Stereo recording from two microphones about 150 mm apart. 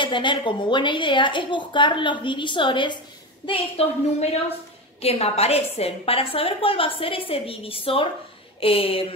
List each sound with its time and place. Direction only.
0.0 s a woman's voice: 30° left (ahead or behind)
3.4 s a woman's voice: 45° left (ahead or behind)